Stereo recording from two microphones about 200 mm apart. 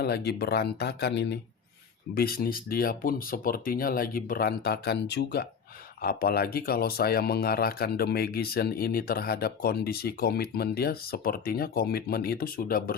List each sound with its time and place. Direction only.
0.0 s speech: 55° left (ahead or behind)